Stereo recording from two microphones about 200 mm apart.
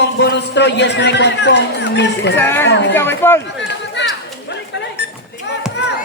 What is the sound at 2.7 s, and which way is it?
Speech, 60° left (ahead or behind).